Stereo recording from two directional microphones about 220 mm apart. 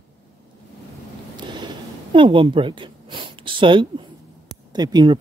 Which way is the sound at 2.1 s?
20° right (ahead or behind).